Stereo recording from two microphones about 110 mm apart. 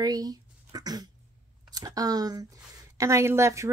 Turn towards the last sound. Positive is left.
turn(degrees=-25)  # may be behind; listen again after turning